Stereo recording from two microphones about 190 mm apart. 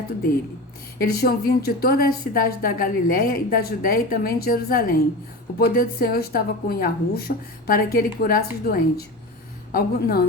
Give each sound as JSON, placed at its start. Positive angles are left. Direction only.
{"t": 0.9, "sound": "a woman's voice", "side_deg": 55}